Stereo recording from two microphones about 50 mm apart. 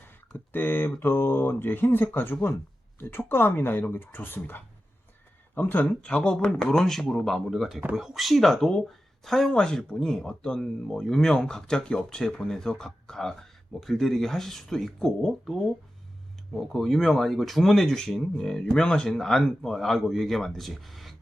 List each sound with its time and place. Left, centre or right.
0.3 s speech: left
5.8 s speech: left
6.6 s speech: centre